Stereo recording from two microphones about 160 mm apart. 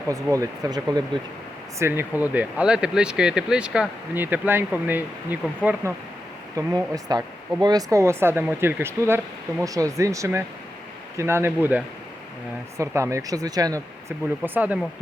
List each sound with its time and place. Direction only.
0.1 s speech: 20° right (ahead or behind)
1.8 s speech: 10° right (ahead or behind)
6.6 s speech: 20° right (ahead or behind)
14.4 s speech: 10° right (ahead or behind)